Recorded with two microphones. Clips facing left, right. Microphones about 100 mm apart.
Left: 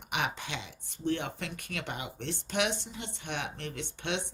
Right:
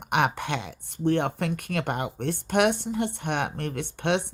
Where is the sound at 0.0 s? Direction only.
55° right (ahead or behind).